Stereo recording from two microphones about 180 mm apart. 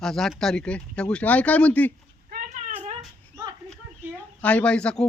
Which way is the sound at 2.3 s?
45° right (ahead or behind).